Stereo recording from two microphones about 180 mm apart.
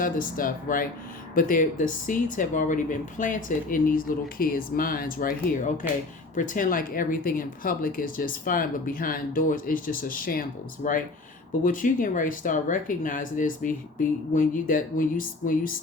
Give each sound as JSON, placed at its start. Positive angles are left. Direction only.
{"t": 0.0, "sound": "speech", "side_deg": 50}